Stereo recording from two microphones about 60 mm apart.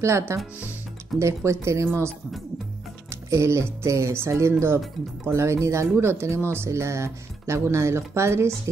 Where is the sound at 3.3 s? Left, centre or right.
Right.